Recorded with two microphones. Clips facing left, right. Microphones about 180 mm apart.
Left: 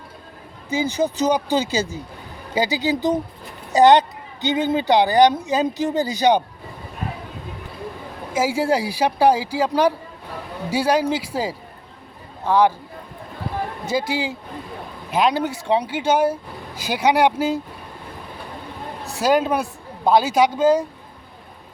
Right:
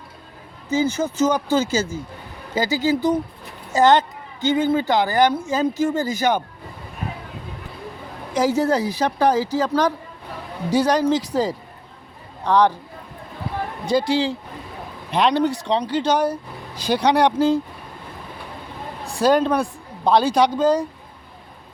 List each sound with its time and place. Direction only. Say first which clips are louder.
0.7 s a woman's voice: right 1 dB; 15° left (ahead or behind)
8.3 s a woman's voice: right 1 dB; 5° left (ahead or behind)
13.8 s a woman's voice: right 5 dB; 5° left (ahead or behind)
19.1 s a woman's voice: right 1 dB; 5° left (ahead or behind)